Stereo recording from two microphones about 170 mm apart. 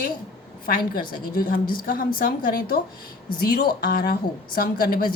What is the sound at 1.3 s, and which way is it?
A woman's voice, 60° left (ahead or behind).